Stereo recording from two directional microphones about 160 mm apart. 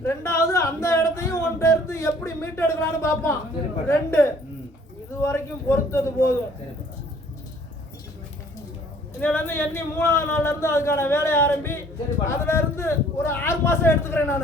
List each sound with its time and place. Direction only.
0.0 s speech: 15° left (ahead or behind)
9.2 s speech: 10° left (ahead or behind)